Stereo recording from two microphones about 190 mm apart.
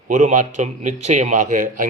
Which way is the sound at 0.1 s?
40° right (ahead or behind).